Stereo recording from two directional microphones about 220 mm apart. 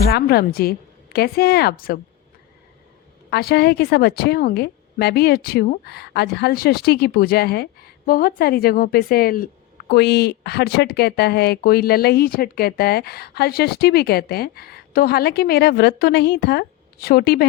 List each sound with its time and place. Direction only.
0.1 s speech: 45° left (ahead or behind)
3.2 s speech: 45° left (ahead or behind)